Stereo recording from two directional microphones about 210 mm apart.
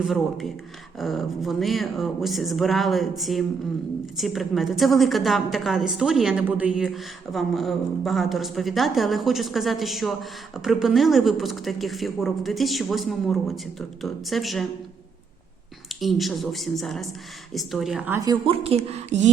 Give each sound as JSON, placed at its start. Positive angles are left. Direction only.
{"t": 0.9, "sound": "a woman's voice", "side_deg": 0}
{"t": 16.0, "sound": "a woman's voice", "side_deg": 0}
{"t": 18.3, "sound": "speech", "side_deg": -25}